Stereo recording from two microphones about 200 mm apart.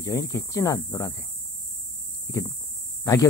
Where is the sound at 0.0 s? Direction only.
15° left (ahead or behind).